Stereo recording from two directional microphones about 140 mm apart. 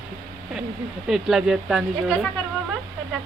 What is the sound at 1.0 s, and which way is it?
Speech, 5° right (ahead or behind).